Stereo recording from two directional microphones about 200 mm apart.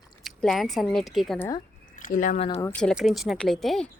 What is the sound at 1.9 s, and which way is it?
Speech, 40° left (ahead or behind).